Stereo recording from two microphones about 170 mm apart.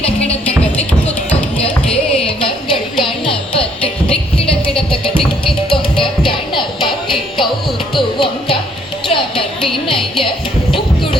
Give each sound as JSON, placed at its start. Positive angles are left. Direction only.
{"t": 0.8, "sound": "music", "side_deg": 10}
{"t": 3.0, "sound": "music", "side_deg": 30}
{"t": 7.9, "sound": "music", "side_deg": 30}
{"t": 10.7, "sound": "music", "side_deg": 30}